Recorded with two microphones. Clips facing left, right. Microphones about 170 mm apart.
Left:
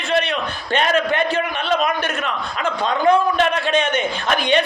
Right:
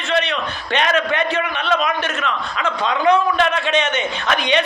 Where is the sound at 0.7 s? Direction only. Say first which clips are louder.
Left 1 dB; 35° left (ahead or behind).